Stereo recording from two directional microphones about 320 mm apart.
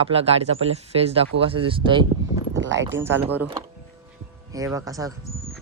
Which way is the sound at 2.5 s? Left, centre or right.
Right.